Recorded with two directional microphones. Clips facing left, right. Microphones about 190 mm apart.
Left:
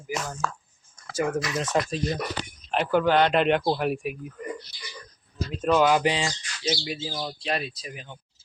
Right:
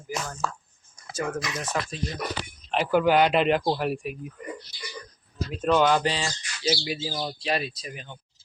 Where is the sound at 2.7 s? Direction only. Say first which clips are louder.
Right 1 dB; 5° right (ahead or behind).